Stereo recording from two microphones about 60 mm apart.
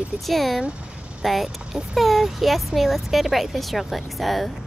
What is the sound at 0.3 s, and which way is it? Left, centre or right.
Speech, centre.